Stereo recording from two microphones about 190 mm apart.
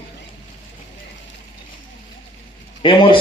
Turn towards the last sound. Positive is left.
turn(degrees=25)  # may be behind; listen again after turning